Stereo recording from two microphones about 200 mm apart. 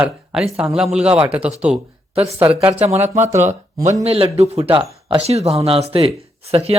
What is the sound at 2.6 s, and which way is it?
Speech, 30° right (ahead or behind).